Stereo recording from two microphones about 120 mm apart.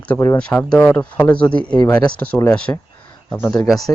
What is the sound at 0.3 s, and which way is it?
Speech, 5° left (ahead or behind).